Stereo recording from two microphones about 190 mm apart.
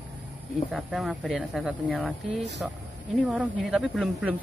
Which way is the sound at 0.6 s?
Centre (ahead or behind).